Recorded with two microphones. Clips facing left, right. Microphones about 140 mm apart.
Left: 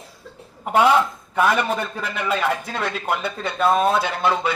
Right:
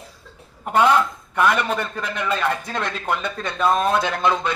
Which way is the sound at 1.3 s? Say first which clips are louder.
Even; 5° left (ahead or behind).